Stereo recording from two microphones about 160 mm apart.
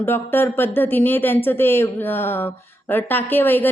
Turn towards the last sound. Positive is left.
turn(degrees=10)  # may be behind; listen again after turning